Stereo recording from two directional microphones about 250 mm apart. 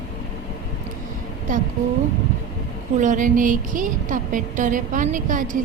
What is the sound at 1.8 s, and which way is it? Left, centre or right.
Speech, right.